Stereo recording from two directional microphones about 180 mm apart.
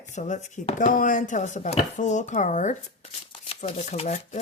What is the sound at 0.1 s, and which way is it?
Speech, 40° left (ahead or behind).